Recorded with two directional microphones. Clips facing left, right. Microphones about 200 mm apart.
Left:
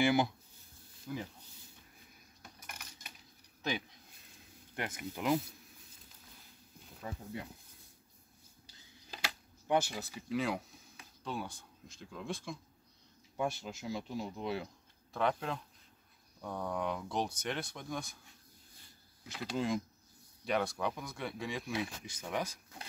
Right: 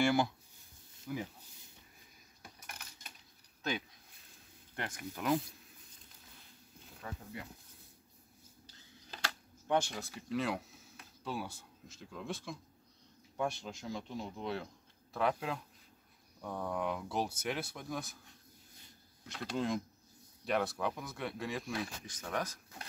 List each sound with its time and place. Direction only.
0.0 s speech: 20° left (ahead or behind)
4.7 s speech: 10° left (ahead or behind)
7.0 s speech: 20° left (ahead or behind)
9.1 s speech: 10° left (ahead or behind)
15.1 s speech: 5° right (ahead or behind)